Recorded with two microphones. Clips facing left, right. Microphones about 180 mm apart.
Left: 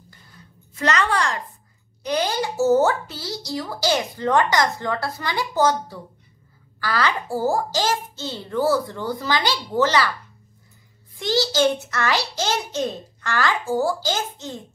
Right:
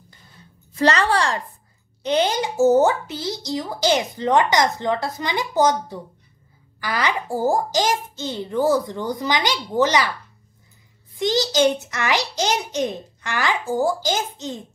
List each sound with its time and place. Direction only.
0.7 s a woman's voice: 30° right (ahead or behind)
11.1 s a child's voice: 20° right (ahead or behind)